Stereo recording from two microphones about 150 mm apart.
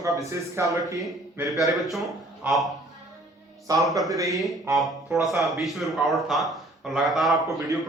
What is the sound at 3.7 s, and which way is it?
Speech, 25° right (ahead or behind).